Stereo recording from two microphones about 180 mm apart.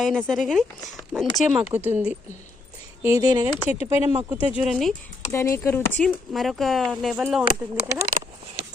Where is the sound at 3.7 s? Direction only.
35° left (ahead or behind).